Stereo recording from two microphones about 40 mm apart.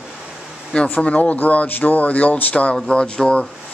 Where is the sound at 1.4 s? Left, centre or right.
Left.